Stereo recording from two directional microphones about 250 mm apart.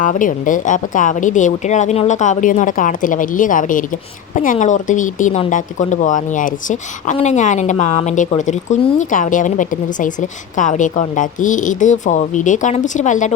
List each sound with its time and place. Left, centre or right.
0.0 s a woman's voice: left